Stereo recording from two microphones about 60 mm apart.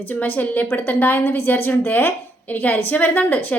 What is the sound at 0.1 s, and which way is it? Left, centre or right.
A woman's voice, left.